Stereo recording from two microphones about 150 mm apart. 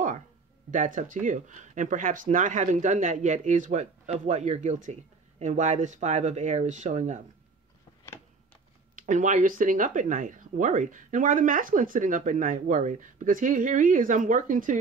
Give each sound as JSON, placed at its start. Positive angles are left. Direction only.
{"t": 0.7, "sound": "speech", "side_deg": -60}
{"t": 8.9, "sound": "speech", "side_deg": -60}